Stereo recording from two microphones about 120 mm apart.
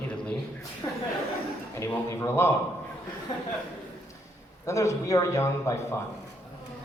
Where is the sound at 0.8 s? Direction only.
35° left (ahead or behind).